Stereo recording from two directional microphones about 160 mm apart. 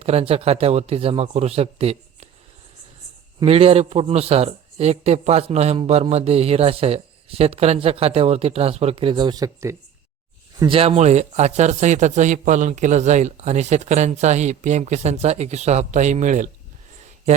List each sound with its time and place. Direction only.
0.0 s a man's voice: 35° right (ahead or behind)
3.4 s a man's voice: 40° right (ahead or behind); by 9.7 s 20° right (ahead or behind)
10.6 s speech: 35° right (ahead or behind)